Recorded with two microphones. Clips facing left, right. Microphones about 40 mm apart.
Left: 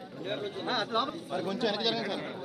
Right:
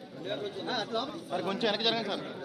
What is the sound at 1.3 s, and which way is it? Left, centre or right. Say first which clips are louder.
Speech: right 3 dB; right.